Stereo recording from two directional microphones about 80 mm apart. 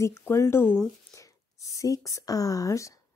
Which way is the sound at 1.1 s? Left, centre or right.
Left.